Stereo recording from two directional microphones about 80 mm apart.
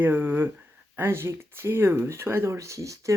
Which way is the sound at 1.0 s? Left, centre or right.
Right.